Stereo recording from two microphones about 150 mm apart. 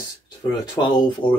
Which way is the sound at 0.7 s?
30° left (ahead or behind).